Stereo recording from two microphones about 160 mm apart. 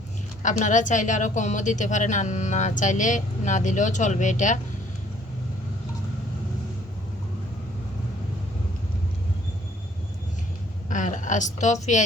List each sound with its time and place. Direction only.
0.4 s a woman's voice: 50° left (ahead or behind)
10.8 s speech: 55° left (ahead or behind)